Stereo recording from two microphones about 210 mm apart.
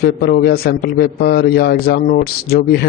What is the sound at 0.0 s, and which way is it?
A man's voice, 50° left (ahead or behind).